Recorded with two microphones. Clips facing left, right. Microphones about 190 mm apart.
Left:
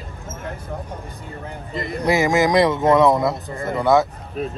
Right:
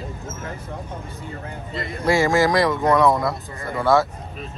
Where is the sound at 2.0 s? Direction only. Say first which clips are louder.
Even; 20° left (ahead or behind).